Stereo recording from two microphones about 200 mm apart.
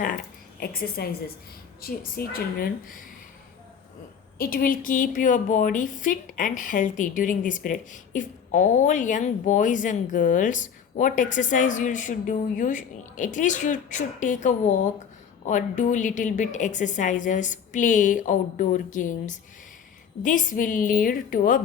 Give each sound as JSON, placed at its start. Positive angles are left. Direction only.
{"t": 0.6, "sound": "a woman's voice", "side_deg": 50}
{"t": 4.4, "sound": "a woman's voice", "side_deg": 45}